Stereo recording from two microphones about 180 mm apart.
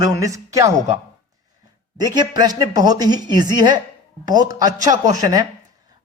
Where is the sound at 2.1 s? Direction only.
25° right (ahead or behind).